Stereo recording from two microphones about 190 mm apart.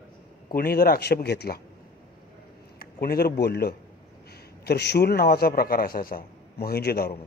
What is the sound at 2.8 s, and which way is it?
A man's voice, 50° left (ahead or behind).